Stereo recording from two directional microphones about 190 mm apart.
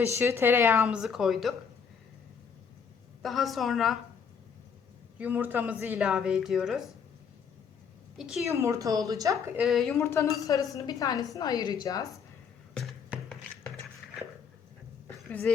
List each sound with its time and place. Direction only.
0.0 s a woman's voice: 15° right (ahead or behind)
3.2 s a woman's voice: centre (ahead or behind)
5.1 s a woman's voice: 10° right (ahead or behind)
8.2 s a woman's voice: centre (ahead or behind)
8.4 s a woman's voice: 15° right (ahead or behind)
9.6 s a woman's voice: centre (ahead or behind)
10.0 s a woman's voice: 15° left (ahead or behind)
12.7 s a sound: centre (ahead or behind)
15.3 s a woman's voice: 10° left (ahead or behind)